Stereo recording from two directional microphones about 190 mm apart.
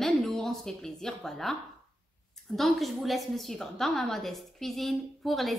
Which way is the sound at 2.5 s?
Centre (ahead or behind).